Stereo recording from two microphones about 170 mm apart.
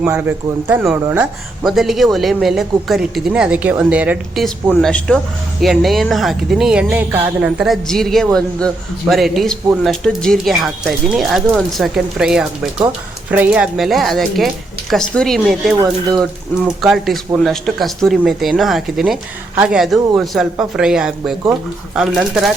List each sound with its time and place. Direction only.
0.1 s a man's voice: 10° right (ahead or behind)
1.6 s speech: centre (ahead or behind)
4.7 s speech: 5° left (ahead or behind)